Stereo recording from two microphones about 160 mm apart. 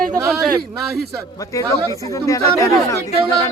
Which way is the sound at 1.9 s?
20° left (ahead or behind).